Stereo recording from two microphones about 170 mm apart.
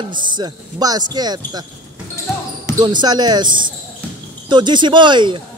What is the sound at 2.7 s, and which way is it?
Speech, 25° right (ahead or behind).